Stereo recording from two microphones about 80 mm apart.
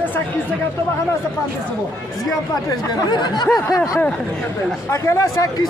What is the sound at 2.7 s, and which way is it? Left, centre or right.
Speech, left.